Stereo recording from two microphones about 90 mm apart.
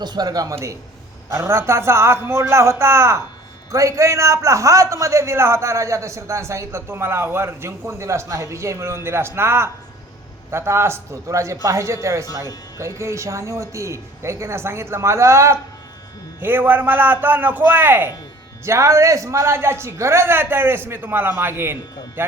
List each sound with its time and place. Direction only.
0.0 s a man's voice: 50° right (ahead or behind)
0.5 s a man's voice: 35° right (ahead or behind)
16.4 s a man's voice: 25° right (ahead or behind)
18.6 s a man's voice: 35° right (ahead or behind)